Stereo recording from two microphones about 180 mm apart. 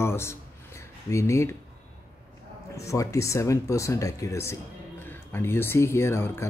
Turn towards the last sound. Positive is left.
turn(degrees=15)  # may be behind; listen again after turning